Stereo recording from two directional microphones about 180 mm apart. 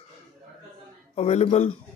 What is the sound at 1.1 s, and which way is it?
Speech, 35° left (ahead or behind).